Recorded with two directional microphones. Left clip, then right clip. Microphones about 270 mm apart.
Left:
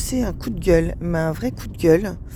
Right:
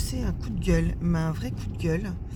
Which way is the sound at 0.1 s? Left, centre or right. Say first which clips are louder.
Left 10 dB; left.